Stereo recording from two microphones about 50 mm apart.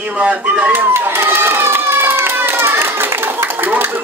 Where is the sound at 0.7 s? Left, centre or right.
Right.